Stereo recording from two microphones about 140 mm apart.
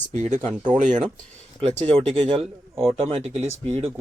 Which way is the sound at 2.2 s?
40° right (ahead or behind).